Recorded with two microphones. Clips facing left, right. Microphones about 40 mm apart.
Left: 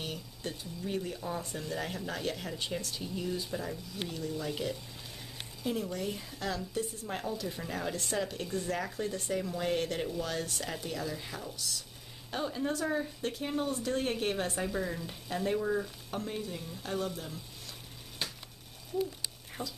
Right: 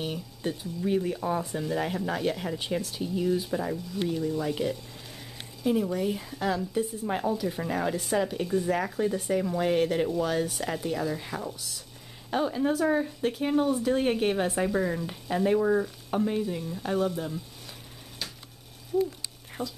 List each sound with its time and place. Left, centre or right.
0.0 s a woman's voice: centre
1.4 s a woman's voice: centre
18.2 s a sound: left
19.6 s speech: centre